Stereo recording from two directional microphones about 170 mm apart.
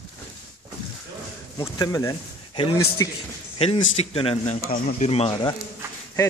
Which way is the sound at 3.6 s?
35° left (ahead or behind).